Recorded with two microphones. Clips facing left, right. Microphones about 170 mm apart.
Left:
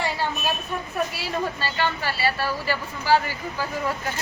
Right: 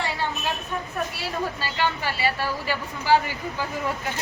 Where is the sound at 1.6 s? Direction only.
15° right (ahead or behind).